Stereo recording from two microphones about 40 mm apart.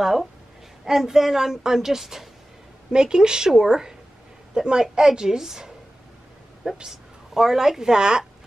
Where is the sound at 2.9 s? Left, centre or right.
Centre.